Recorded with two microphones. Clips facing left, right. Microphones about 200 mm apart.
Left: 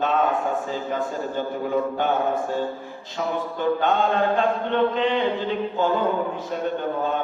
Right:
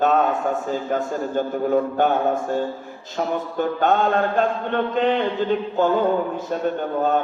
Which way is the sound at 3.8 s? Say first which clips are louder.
Right 5 dB; 45° right (ahead or behind).